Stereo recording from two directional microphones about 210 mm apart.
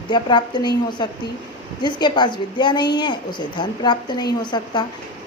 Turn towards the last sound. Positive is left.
turn(degrees=20)  # may be behind; listen again after turning